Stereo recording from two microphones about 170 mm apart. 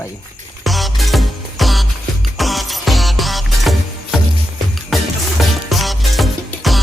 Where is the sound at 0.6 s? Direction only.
Centre (ahead or behind).